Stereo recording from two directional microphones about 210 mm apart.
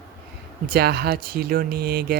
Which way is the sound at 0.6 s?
45° right (ahead or behind).